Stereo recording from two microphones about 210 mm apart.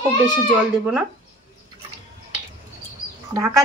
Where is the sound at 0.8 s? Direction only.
10° right (ahead or behind).